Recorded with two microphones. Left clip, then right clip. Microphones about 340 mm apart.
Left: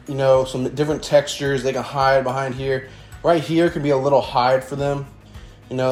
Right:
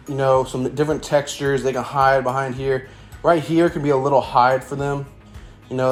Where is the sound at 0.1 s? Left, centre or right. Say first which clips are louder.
Left 1 dB; centre.